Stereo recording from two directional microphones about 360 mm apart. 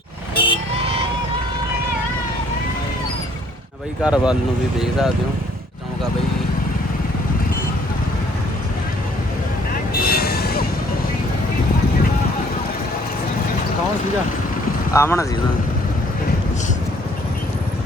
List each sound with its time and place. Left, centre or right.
0.3 s vehicle: centre
4.0 s speech: centre
10.0 s vehicle: left
14.9 s speech: centre